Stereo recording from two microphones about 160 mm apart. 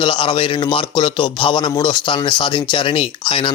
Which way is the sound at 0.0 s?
30° left (ahead or behind).